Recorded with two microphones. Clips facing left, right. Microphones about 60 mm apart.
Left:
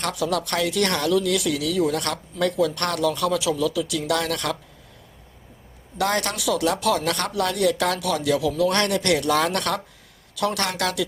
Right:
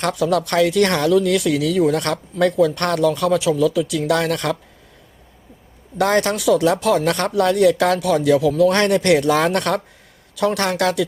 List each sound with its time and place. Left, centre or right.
0.0 s speech: right
6.0 s speech: right
6.2 s speech: right